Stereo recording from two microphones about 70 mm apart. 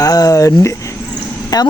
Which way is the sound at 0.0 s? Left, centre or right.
Left.